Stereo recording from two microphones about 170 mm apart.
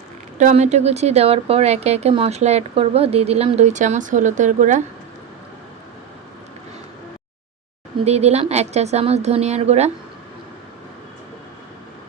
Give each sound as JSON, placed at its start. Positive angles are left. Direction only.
{"t": 0.3, "sound": "speech", "side_deg": -40}
{"t": 8.0, "sound": "speech", "side_deg": -40}